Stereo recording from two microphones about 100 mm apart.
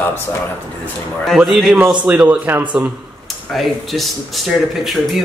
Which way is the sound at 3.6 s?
Centre (ahead or behind).